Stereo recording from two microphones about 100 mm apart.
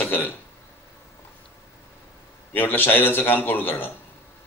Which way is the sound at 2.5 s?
20° left (ahead or behind).